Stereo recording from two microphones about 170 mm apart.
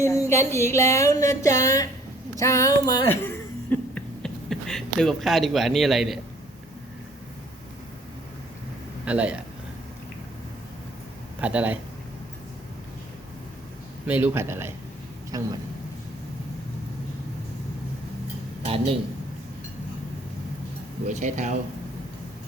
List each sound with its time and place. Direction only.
0.0 s speech: 20° left (ahead or behind)
1.6 s a sound: 20° left (ahead or behind)
3.2 s a sound: 10° left (ahead or behind)
9.0 s a man's voice: 5° right (ahead or behind)
11.3 s speech: 10° right (ahead or behind)
14.1 s a man's voice: 10° right (ahead or behind)
18.6 s speech: 35° right (ahead or behind)
21.1 s speech: 45° right (ahead or behind)